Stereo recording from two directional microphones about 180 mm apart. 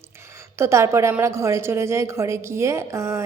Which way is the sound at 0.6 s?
15° right (ahead or behind).